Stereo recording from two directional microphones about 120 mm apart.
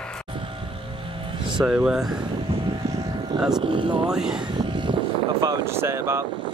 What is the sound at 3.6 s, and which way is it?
Speech, 45° right (ahead or behind).